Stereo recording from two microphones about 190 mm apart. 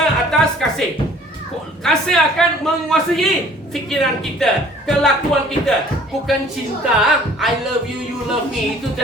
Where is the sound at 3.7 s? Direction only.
Centre (ahead or behind).